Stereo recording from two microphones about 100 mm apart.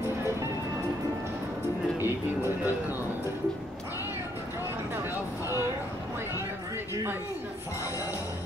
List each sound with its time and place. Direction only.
2.0 s music: 20° right (ahead or behind)